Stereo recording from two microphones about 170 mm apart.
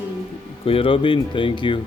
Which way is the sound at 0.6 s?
35° left (ahead or behind).